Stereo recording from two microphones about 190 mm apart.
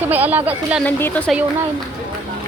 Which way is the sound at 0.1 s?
10° right (ahead or behind).